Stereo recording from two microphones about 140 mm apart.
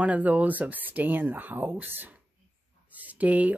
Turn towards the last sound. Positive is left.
turn(degrees=-10)  # may be behind; listen again after turning